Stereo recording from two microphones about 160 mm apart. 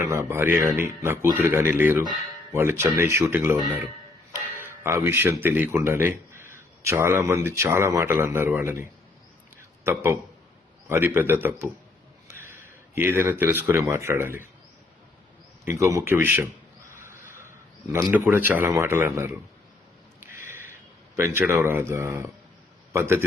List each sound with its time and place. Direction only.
0.0 s speech: 20° right (ahead or behind)
15.6 s speech: 20° right (ahead or behind)
17.0 s a sound: 15° right (ahead or behind)
18.1 s speech: 15° right (ahead or behind)
21.2 s a man's voice: 15° right (ahead or behind)